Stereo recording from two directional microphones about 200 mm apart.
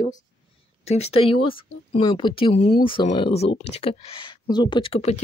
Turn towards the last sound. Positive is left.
turn(degrees=30)  # may be behind; listen again after turning